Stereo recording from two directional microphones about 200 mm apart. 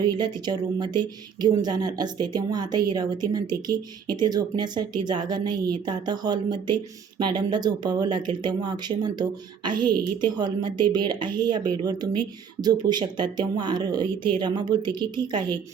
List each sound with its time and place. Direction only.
0.0 s speech: 20° right (ahead or behind)